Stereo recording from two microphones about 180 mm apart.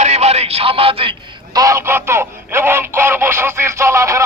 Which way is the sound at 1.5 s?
15° right (ahead or behind).